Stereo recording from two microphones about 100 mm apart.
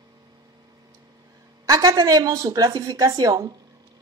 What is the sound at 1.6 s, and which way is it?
A woman's voice, 40° right (ahead or behind).